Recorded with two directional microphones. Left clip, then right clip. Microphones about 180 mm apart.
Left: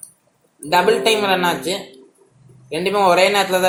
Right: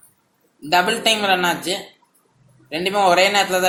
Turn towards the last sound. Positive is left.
turn(degrees=-20)  # may be behind; listen again after turning